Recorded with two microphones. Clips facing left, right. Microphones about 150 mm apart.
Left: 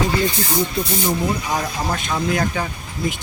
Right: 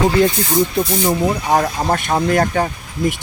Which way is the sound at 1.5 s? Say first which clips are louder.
Right 7 dB; 55° right (ahead or behind).